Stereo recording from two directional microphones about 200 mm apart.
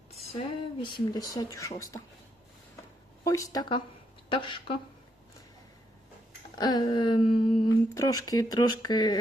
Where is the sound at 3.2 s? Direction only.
15° left (ahead or behind).